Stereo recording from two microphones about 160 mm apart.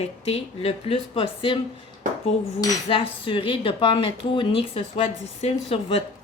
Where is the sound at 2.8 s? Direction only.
35° left (ahead or behind).